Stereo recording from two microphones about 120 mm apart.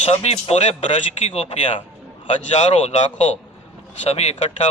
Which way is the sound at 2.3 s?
70° left (ahead or behind).